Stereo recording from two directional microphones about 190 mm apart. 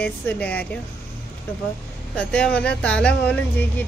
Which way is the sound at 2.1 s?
5° left (ahead or behind).